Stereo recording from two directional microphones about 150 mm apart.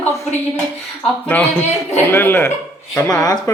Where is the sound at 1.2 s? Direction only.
10° left (ahead or behind).